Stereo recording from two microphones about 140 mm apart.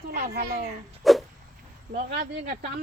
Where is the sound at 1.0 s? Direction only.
Centre (ahead or behind).